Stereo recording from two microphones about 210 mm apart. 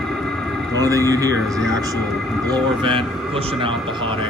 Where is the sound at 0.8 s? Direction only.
15° right (ahead or behind).